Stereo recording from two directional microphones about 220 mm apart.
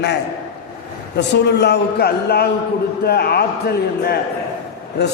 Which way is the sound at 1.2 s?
50° left (ahead or behind).